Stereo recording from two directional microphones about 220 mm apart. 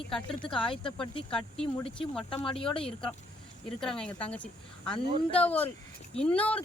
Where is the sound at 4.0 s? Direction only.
5° left (ahead or behind).